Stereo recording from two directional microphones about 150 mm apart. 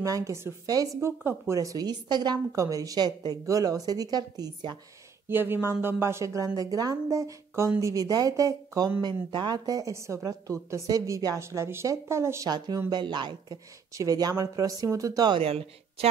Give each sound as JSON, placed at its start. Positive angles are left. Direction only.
{"t": 0.0, "sound": "a woman's voice", "side_deg": -20}
{"t": 5.3, "sound": "a woman's voice", "side_deg": -15}
{"t": 15.4, "sound": "a woman's voice", "side_deg": -40}